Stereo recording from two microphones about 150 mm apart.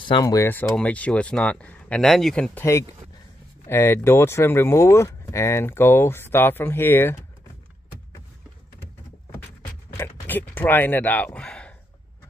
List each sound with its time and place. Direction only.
0.0 s speech: 25° left (ahead or behind); by 2.6 s 5° left (ahead or behind)
3.6 s speech: 15° left (ahead or behind)
9.9 s a sound: 15° left (ahead or behind)